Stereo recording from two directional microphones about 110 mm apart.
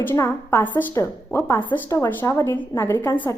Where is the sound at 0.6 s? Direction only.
15° left (ahead or behind).